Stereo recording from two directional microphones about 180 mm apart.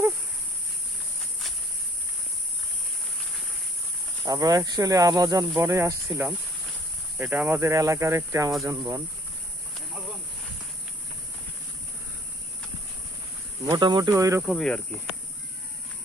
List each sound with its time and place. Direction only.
4.3 s speech: 20° right (ahead or behind)
13.7 s speech: 25° right (ahead or behind)
14.4 s speech: centre (ahead or behind)